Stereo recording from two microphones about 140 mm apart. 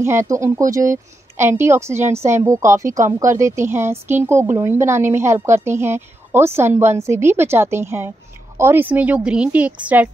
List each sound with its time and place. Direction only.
0.0 s a woman's voice: 20° right (ahead or behind)